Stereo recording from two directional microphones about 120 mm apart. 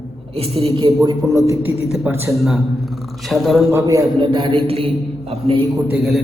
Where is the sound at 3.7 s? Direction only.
30° right (ahead or behind); by 5.6 s 55° right (ahead or behind).